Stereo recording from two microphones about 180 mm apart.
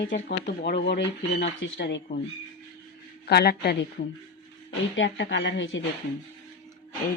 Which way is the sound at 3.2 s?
65° left (ahead or behind).